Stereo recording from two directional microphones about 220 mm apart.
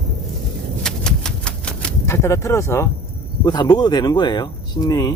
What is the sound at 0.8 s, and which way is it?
Typewriter, 5° left (ahead or behind).